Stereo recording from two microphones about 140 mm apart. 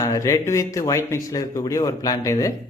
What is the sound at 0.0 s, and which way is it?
A man's voice, 25° left (ahead or behind).